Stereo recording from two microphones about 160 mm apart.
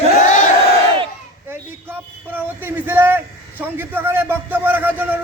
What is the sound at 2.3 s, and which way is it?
A man's voice, 10° right (ahead or behind).